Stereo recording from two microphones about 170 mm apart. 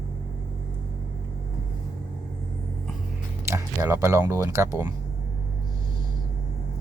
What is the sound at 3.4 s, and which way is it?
Speech, 15° right (ahead or behind).